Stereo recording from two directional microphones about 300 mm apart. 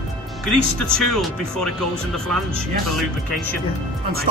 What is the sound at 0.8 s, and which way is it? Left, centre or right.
Speech, centre.